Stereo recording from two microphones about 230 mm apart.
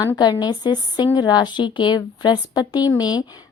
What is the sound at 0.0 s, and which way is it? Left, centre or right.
A woman's voice, centre.